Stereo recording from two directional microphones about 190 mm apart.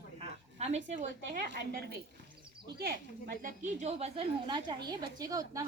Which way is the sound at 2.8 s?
55° right (ahead or behind).